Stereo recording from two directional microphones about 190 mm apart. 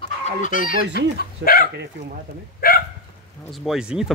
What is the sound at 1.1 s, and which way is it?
Speech, 50° left (ahead or behind).